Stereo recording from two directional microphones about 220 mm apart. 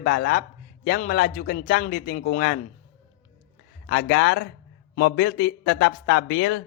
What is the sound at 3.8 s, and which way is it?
Speech, 45° left (ahead or behind).